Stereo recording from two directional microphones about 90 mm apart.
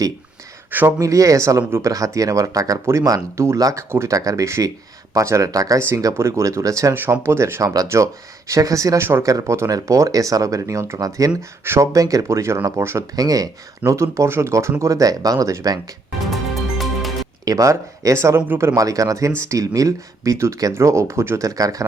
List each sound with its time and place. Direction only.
0.7 s speech: 20° right (ahead or behind)
0.9 s speech: 40° right (ahead or behind)
6.9 s speech: 25° right (ahead or behind)
11.6 s speech: 25° right (ahead or behind)
11.9 s speech: 40° right (ahead or behind)
13.1 s speech: 45° right (ahead or behind)
16.3 s music: centre (ahead or behind)
17.4 s speech: 40° right (ahead or behind)